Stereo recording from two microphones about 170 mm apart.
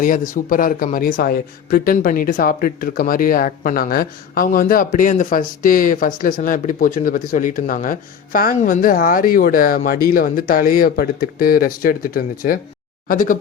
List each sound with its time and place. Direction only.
0.0 s speech: 50° left (ahead or behind)